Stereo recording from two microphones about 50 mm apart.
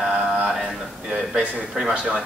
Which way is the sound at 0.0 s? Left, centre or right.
Centre.